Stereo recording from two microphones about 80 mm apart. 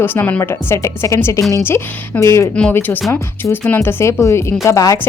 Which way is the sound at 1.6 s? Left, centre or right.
Left.